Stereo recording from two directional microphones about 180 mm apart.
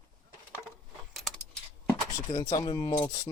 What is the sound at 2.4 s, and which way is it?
Speech, 20° left (ahead or behind).